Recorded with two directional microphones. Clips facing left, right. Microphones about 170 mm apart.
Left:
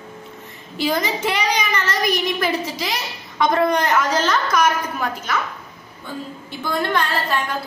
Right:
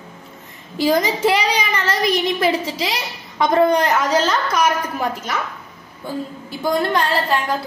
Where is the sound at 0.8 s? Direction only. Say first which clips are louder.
Right 5 dB; 35° right (ahead or behind).